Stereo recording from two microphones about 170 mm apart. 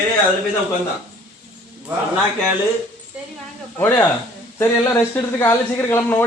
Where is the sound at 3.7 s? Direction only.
10° left (ahead or behind).